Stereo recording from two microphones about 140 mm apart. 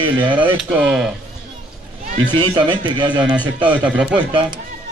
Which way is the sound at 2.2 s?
15° left (ahead or behind).